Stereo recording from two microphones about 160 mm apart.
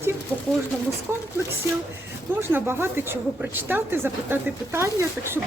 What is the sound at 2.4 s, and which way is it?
Speech, 15° right (ahead or behind).